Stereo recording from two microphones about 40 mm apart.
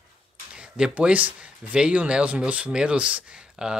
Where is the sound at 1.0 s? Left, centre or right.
Right.